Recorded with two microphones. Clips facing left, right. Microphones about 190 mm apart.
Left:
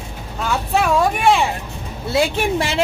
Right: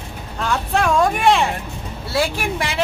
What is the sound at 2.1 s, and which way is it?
Speech, 25° left (ahead or behind).